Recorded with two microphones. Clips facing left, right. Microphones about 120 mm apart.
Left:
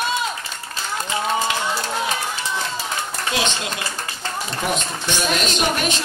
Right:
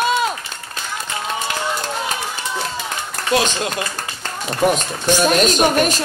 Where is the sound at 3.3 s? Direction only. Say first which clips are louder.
Right 7 dB; 50° right (ahead or behind).